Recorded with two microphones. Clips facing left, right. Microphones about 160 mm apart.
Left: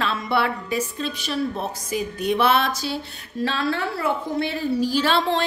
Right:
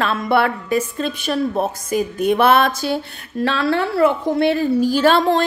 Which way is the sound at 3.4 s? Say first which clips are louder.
Right 5 dB; 65° right (ahead or behind).